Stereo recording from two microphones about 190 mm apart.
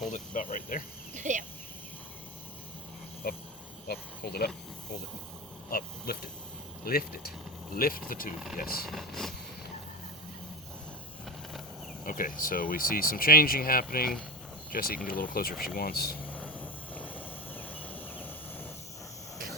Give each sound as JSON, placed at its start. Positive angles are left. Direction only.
{"t": 0.1, "sound": "speech", "side_deg": 45}
{"t": 1.1, "sound": "cricket", "side_deg": -40}
{"t": 3.2, "sound": "cricket", "side_deg": 55}
{"t": 5.7, "sound": "a sound", "side_deg": 50}
{"t": 6.8, "sound": "speech", "side_deg": 50}
{"t": 8.9, "sound": "speech", "side_deg": 0}
{"t": 12.0, "sound": "speech", "side_deg": 45}
{"t": 16.2, "sound": "vehicle", "side_deg": 10}
{"t": 17.8, "sound": "a sound", "side_deg": 10}